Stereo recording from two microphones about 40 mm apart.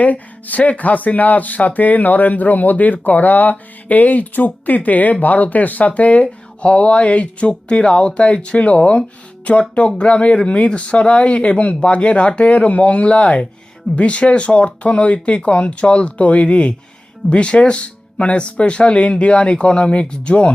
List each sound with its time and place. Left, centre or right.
0.0 s speech: left